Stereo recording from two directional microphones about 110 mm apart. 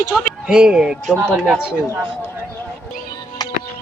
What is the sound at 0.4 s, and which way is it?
Speech, 5° right (ahead or behind).